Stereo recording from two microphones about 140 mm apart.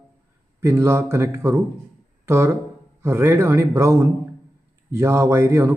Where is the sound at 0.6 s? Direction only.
20° right (ahead or behind).